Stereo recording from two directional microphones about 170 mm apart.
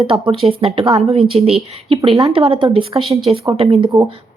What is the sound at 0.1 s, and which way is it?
A woman's voice, 30° right (ahead or behind).